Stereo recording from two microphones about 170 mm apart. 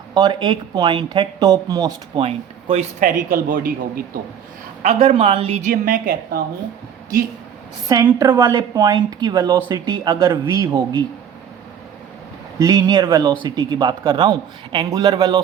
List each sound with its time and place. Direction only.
0.1 s speech: 25° right (ahead or behind)
2.2 s speech: 35° right (ahead or behind)
3.0 s speech: 55° right (ahead or behind)
4.8 s a woman's voice: 35° right (ahead or behind); by 6.4 s 55° right (ahead or behind)
8.0 s speech: 15° right (ahead or behind)
12.5 s speech: 20° right (ahead or behind)